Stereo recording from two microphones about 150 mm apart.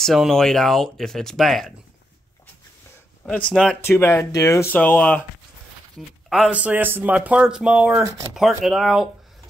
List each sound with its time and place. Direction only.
0.0 s speech: centre (ahead or behind)
3.3 s speech: 5° left (ahead or behind)
3.8 s speech: 15° left (ahead or behind)
5.9 s speech: centre (ahead or behind)